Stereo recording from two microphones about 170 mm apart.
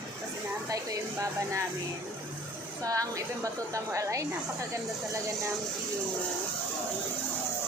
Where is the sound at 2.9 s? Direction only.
20° right (ahead or behind).